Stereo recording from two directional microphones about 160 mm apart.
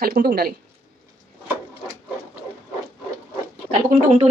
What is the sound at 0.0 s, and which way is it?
Speech, 80° right.